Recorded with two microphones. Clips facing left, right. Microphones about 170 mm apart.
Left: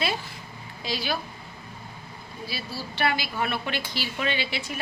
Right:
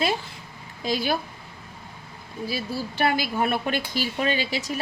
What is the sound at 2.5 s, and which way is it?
Speech, 50° right (ahead or behind).